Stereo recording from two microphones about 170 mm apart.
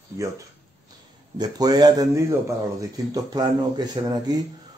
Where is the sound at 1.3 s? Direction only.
25° right (ahead or behind).